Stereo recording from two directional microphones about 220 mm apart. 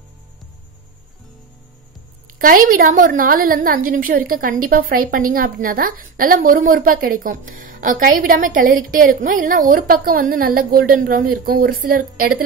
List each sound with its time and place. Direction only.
2.2 s a woman's voice: 40° right (ahead or behind)